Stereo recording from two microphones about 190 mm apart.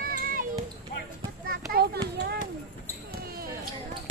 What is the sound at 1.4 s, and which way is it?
Children playing, 50° right (ahead or behind).